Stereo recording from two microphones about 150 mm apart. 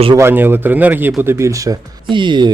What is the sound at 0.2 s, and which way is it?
A man's voice, 15° right (ahead or behind).